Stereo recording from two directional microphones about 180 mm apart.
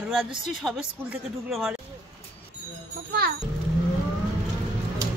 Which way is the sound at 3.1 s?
60° right (ahead or behind).